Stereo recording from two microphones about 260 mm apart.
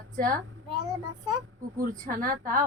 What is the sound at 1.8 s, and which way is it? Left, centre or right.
Speech, right.